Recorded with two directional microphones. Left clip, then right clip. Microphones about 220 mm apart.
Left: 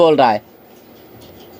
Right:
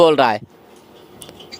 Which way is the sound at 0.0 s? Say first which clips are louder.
Left 1 dB; 35° right (ahead or behind).